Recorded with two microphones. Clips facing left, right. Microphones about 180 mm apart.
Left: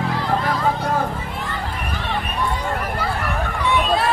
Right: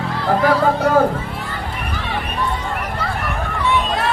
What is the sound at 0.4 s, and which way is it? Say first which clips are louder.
Hubbub: right 6 dB; 70° right (ahead or behind).